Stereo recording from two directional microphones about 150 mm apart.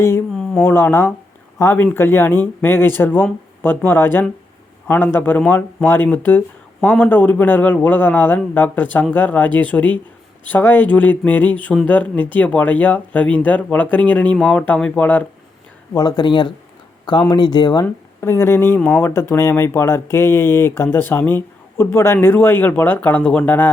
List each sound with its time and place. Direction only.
0.5 s speech: 15° left (ahead or behind)
15.9 s speech: 25° left (ahead or behind)
17.8 s speech: 15° left (ahead or behind)